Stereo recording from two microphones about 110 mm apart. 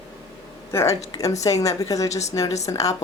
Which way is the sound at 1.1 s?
30° left (ahead or behind).